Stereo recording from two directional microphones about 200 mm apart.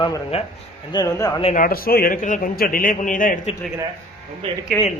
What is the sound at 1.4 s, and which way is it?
A man's voice, 40° left (ahead or behind).